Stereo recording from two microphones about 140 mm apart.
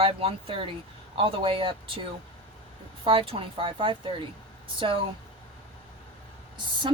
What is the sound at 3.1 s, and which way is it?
Speech, 40° right (ahead or behind).